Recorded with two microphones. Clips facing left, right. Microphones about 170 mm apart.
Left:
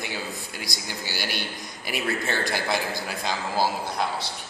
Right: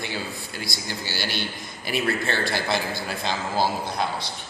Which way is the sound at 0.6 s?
15° left (ahead or behind).